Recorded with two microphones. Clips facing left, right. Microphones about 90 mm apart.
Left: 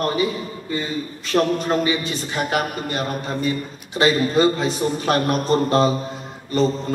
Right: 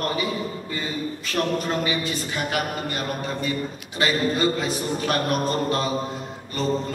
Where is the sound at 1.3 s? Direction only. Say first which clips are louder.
Left 7 dB; 35° left (ahead or behind).